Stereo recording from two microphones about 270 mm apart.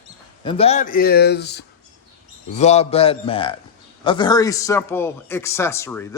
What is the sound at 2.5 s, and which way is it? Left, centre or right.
A man's voice, left.